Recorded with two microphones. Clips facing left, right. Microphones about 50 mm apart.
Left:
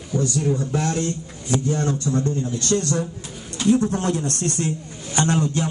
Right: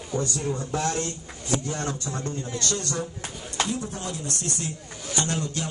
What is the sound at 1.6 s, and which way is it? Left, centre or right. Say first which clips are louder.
Speech: left 7 dB; right.